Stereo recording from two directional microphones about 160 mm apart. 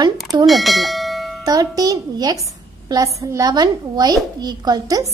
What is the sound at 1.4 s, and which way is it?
A woman's voice, 25° right (ahead or behind).